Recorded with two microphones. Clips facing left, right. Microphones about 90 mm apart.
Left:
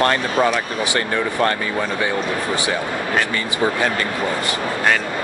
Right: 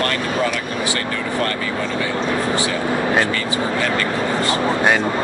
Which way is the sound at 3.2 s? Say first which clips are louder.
Even; 30° left (ahead or behind).